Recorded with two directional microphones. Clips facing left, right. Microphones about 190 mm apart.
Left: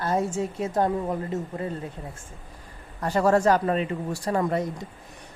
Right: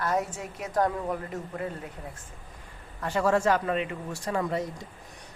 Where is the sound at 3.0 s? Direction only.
40° left (ahead or behind).